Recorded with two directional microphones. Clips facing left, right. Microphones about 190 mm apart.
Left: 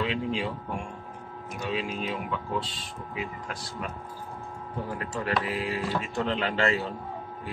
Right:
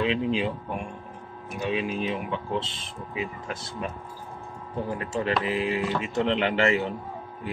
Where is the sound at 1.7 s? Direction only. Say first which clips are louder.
Right 3 dB; 20° right (ahead or behind).